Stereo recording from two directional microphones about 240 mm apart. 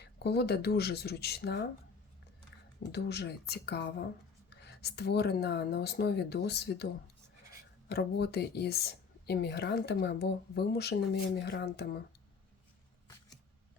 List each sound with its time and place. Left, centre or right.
0.0 s speech: left
2.9 s speech: left
7.9 s speech: left